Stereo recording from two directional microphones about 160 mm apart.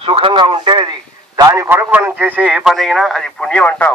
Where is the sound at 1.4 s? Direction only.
20° right (ahead or behind).